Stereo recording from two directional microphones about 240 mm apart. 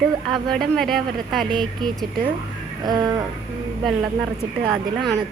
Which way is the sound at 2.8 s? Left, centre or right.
Centre.